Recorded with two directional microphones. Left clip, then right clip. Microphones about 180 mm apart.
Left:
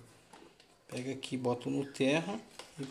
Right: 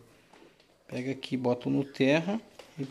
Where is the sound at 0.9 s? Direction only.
45° right (ahead or behind).